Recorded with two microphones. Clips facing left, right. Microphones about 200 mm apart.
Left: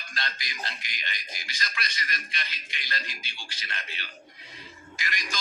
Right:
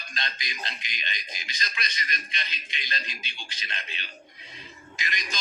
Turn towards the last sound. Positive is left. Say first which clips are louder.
# even
turn(degrees=-20)  # may be behind; listen again after turning